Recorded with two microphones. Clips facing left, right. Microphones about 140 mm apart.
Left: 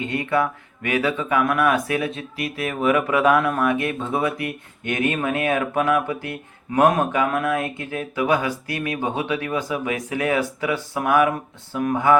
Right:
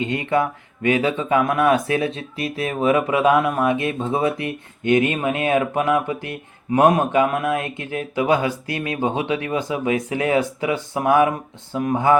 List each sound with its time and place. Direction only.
0.0 s speech: 20° right (ahead or behind)